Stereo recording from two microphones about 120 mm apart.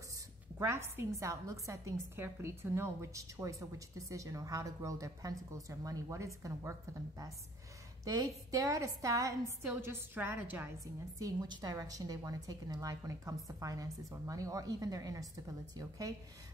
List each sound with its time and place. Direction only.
0.6 s a woman's voice: 20° right (ahead or behind)
8.0 s a woman's voice: 30° right (ahead or behind)
11.1 s a woman's voice: 30° right (ahead or behind)